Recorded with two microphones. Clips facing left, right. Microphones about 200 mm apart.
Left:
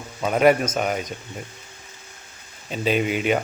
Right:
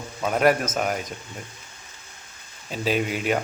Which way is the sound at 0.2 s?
Centre (ahead or behind).